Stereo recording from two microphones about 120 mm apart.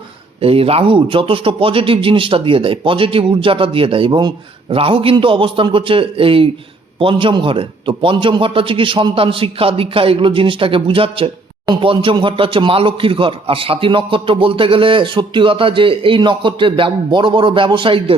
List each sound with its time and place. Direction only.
0.4 s a man's voice: 50° right (ahead or behind)